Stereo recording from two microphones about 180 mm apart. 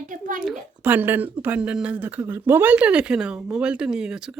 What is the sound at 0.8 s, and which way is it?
Speech, 10° right (ahead or behind).